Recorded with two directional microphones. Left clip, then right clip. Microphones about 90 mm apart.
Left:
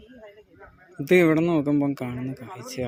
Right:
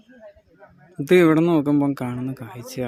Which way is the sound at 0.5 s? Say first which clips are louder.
Even; 35° right (ahead or behind).